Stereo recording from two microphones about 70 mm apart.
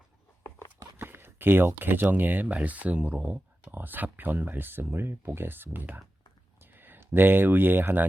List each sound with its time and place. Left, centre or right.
0.9 s speech: right